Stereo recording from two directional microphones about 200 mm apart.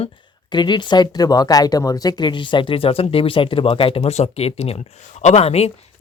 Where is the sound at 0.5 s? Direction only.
20° left (ahead or behind).